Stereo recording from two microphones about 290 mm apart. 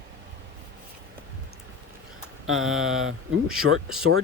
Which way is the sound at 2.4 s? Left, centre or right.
Right.